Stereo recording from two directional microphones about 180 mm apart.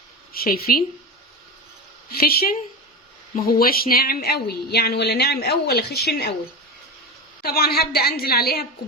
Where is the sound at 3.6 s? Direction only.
55° left (ahead or behind).